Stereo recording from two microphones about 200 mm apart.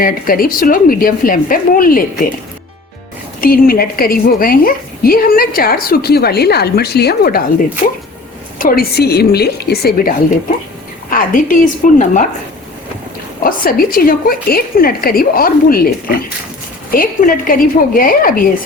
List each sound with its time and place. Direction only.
0.0 s a woman's voice: 45° left (ahead or behind)
3.4 s a woman's voice: 45° left (ahead or behind)
8.5 s a woman's voice: 50° left (ahead or behind)
13.4 s a woman's voice: 45° left (ahead or behind)
16.9 s a woman's voice: 45° left (ahead or behind)